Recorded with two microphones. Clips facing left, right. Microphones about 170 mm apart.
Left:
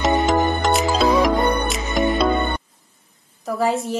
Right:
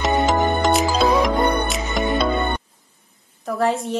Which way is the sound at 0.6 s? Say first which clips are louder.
Right 1 dB; centre (ahead or behind).